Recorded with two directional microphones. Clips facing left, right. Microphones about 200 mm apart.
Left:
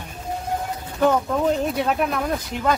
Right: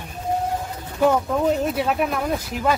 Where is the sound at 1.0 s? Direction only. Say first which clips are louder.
Right 1 dB; 5° right (ahead or behind).